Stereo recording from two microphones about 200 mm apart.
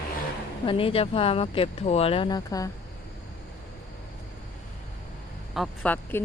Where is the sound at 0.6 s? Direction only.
25° left (ahead or behind).